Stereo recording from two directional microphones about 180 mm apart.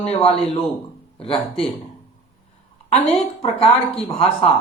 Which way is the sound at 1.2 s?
30° left (ahead or behind).